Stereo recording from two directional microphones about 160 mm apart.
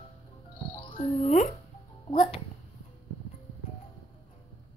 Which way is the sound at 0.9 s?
45° left (ahead or behind).